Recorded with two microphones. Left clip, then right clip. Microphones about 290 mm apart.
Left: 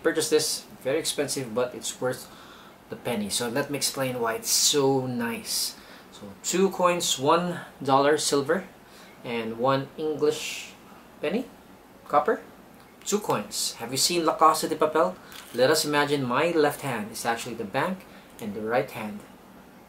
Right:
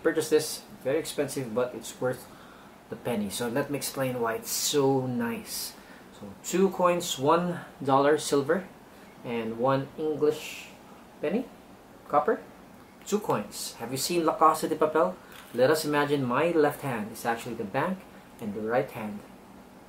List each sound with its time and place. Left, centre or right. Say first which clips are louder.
0.0 s speech: left 1 dB; centre
3.0 s speech: left 2 dB; centre
4.8 s speech: left 2 dB; centre
5.2 s speech: left 4 dB; centre
9.9 s speech: left 1 dB; right
10.2 s speech: left 2 dB; centre
12.1 s speech: left 2 dB; centre
14.2 s speech: left 2 dB; centre
14.5 s speech: left 2 dB; centre